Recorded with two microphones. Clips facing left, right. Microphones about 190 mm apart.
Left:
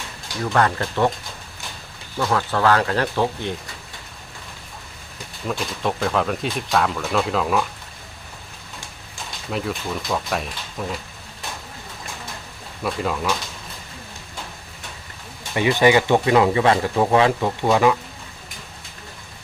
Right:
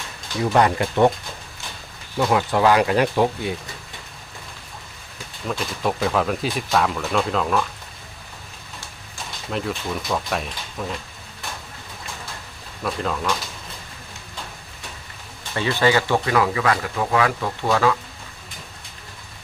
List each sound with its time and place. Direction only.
0.5 s speech: 15° right (ahead or behind)
2.1 s speech: 15° right (ahead or behind)
5.5 s speech: centre (ahead or behind)
9.5 s speech: centre (ahead or behind)
12.8 s speech: 5° left (ahead or behind)
15.5 s speech: 15° left (ahead or behind)